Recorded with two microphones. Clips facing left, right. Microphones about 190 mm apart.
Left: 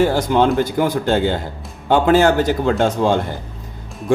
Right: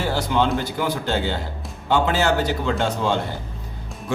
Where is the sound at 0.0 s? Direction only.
50° left (ahead or behind).